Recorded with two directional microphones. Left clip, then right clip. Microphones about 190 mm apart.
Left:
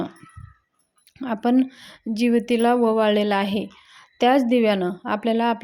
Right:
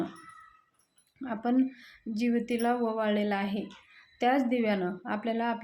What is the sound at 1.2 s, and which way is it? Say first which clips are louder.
A woman's voice: left 8 dB; 50° left (ahead or behind).